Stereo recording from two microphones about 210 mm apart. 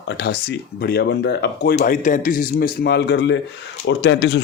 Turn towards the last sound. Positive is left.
turn(degrees=55)  # may be behind; listen again after turning